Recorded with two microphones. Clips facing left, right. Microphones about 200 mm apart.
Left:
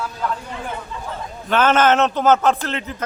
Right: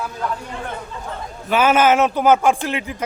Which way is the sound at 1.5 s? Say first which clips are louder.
Right 1 dB; 10° right (ahead or behind).